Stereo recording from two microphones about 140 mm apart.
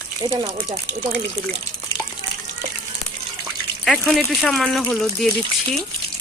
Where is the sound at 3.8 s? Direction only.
Centre (ahead or behind).